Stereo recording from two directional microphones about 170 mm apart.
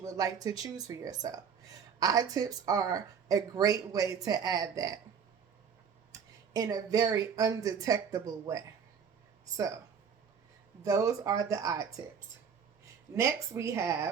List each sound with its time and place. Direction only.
0.0 s speech: 20° right (ahead or behind)
6.1 s speech: 20° right (ahead or behind)
10.8 s speech: 20° right (ahead or behind)
13.1 s speech: 15° right (ahead or behind)